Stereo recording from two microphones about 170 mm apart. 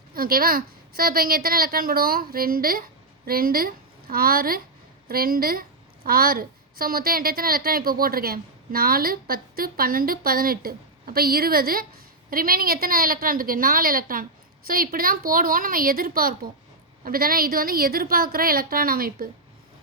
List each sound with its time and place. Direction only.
0.1 s a woman's voice: 60° right (ahead or behind)